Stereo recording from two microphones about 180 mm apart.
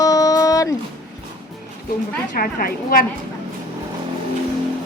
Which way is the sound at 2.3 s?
55° left (ahead or behind).